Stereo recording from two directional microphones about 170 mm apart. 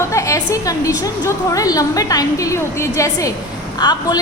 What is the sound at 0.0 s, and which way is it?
A woman's voice, 20° left (ahead or behind).